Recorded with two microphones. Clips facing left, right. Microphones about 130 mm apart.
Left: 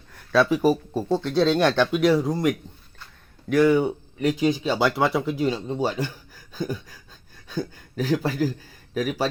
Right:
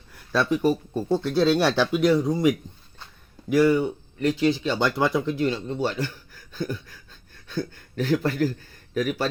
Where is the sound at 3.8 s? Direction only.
15° left (ahead or behind).